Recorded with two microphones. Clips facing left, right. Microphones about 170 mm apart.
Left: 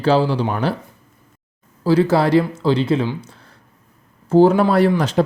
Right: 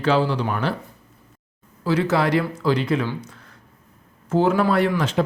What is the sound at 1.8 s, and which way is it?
Speech, 35° left (ahead or behind).